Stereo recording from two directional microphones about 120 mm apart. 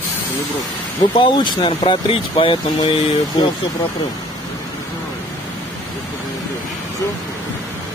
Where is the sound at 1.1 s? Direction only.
40° left (ahead or behind).